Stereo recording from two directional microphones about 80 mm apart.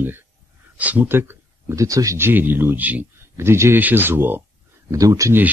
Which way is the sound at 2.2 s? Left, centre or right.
Right.